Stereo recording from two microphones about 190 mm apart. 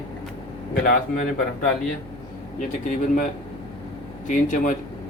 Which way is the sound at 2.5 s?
45° left (ahead or behind).